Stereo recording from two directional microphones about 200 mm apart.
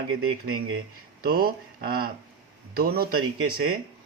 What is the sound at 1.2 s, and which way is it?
Speech, 50° right (ahead or behind).